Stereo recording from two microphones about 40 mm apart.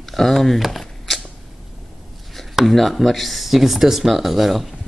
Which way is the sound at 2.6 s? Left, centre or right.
Centre.